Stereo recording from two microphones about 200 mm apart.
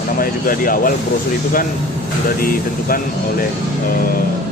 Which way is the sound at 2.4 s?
45° left (ahead or behind).